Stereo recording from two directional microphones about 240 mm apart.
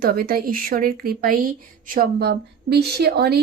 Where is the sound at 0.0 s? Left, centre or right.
Right.